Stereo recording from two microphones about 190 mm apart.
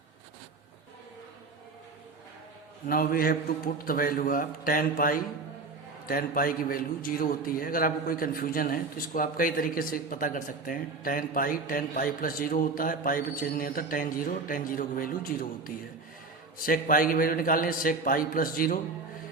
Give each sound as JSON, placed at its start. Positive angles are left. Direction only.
{"t": 2.8, "sound": "a man's voice", "side_deg": 50}